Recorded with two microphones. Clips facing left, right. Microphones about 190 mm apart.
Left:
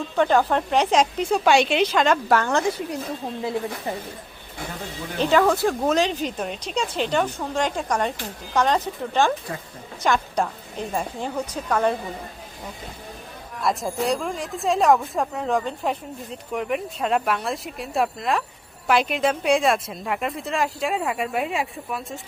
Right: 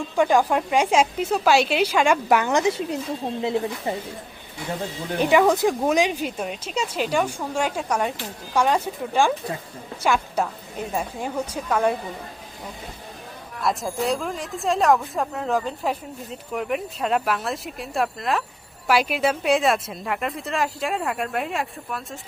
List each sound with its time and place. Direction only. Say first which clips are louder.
0.2 s speech: even; 10° right (ahead or behind)
5.2 s speech: right 1 dB; 15° right (ahead or behind)
13.6 s a woman's voice: even; centre (ahead or behind)